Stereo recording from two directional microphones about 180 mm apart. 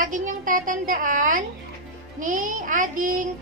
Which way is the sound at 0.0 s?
45° right (ahead or behind).